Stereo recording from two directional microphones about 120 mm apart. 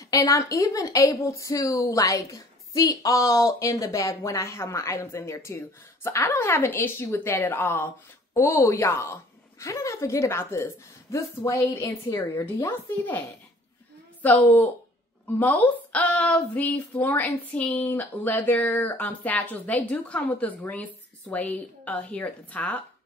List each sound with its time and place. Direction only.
0.3 s a woman's voice: 25° left (ahead or behind)
14.2 s speech: 15° left (ahead or behind)